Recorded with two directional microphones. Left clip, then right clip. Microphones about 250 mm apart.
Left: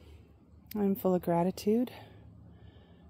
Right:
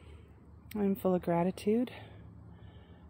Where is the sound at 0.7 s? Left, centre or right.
Centre.